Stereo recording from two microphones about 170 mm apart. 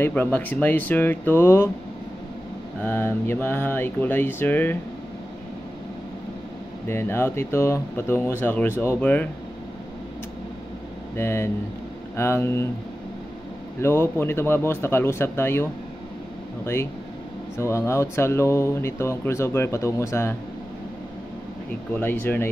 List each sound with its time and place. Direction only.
0.0 s speech: 10° left (ahead or behind)
2.8 s speech: 10° left (ahead or behind)
6.9 s speech: 15° left (ahead or behind)
11.1 s speech: 15° left (ahead or behind)
13.7 s speech: 15° left (ahead or behind)
17.6 s speech: 15° left (ahead or behind)
22.0 s speech: 10° left (ahead or behind)